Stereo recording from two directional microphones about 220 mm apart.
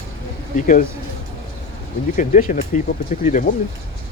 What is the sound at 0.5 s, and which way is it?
Speech, 35° left (ahead or behind).